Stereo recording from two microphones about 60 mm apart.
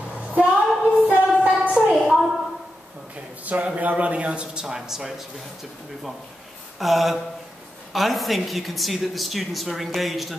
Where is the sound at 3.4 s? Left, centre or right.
Right; by 5.1 s centre.